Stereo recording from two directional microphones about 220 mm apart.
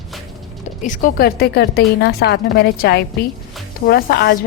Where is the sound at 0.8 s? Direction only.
35° left (ahead or behind).